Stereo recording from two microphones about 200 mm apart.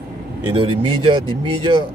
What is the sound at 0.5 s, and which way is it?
Speech, 25° right (ahead or behind).